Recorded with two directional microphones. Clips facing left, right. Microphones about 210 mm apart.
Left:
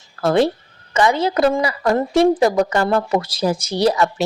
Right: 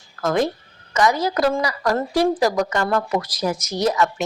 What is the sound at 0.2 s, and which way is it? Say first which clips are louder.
A woman's voice: left 4 dB; 30° left (ahead or behind).